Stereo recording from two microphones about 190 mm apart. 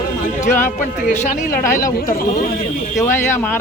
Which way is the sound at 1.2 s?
45° left (ahead or behind).